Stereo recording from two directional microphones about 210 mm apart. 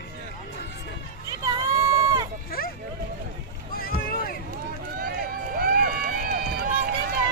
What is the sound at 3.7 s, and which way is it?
Boat, 45° left (ahead or behind).